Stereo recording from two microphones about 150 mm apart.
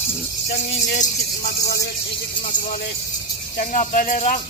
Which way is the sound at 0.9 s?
75° left (ahead or behind).